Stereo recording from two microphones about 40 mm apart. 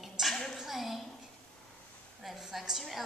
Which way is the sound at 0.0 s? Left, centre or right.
Centre.